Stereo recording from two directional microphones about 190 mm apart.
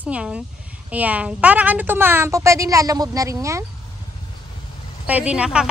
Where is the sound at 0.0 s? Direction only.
5° right (ahead or behind).